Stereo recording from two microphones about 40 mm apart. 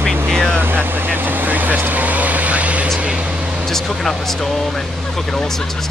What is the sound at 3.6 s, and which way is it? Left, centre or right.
Speech, centre.